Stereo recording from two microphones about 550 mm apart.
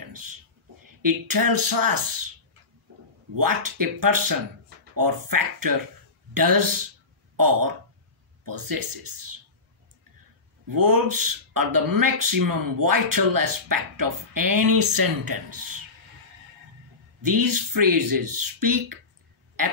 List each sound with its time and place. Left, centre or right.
0.0 s a sound: right
1.0 s speech: right
3.3 s speech: right
10.7 s speech: right
17.2 s speech: right